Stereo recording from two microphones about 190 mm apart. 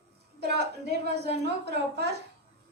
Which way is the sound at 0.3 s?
60° right (ahead or behind).